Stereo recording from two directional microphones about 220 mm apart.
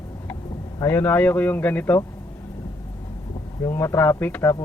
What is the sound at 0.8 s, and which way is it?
Speech, 10° left (ahead or behind).